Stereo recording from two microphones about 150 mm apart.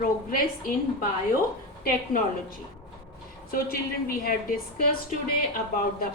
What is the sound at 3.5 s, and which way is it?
A woman's voice, 80° left.